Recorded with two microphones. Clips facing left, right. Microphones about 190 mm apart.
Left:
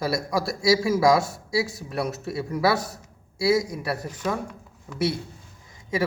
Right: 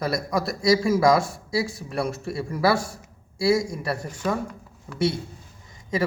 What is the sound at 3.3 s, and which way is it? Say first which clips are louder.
Speech: even; 5° left (ahead or behind).